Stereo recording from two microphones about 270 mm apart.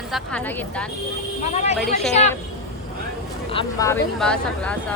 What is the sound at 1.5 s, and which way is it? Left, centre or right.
Speech, left.